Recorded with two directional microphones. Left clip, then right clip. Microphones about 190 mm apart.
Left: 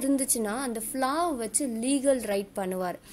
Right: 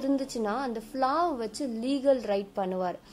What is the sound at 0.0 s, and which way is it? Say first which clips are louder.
A woman's voice: left 1 dB; 30° left (ahead or behind).